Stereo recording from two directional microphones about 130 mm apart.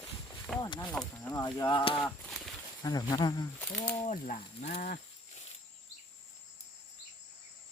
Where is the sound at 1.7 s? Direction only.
35° left (ahead or behind).